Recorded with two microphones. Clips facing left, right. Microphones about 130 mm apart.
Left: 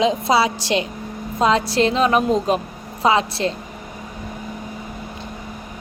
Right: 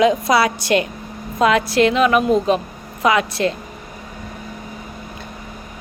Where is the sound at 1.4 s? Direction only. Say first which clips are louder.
Right 2 dB; 30° left (ahead or behind).